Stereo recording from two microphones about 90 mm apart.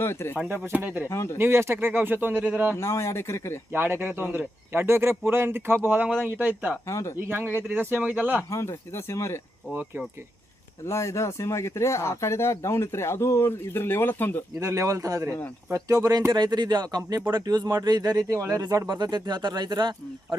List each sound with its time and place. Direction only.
0.0 s speech: 30° left (ahead or behind)
0.3 s speech: 25° right (ahead or behind)
1.0 s speech: 30° left (ahead or behind)
1.4 s speech: 30° right (ahead or behind)
2.7 s speech: 30° left (ahead or behind)
3.7 s speech: 25° right (ahead or behind)
6.8 s speech: 35° left (ahead or behind)
7.3 s speech: 25° right (ahead or behind)
8.4 s speech: 35° left (ahead or behind)
10.8 s speech: 35° left (ahead or behind)
14.6 s speech: 35° right (ahead or behind)